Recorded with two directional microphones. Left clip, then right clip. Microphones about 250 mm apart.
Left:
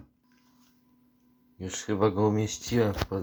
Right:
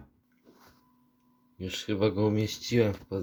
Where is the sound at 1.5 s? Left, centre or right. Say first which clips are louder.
Left 1 dB; centre.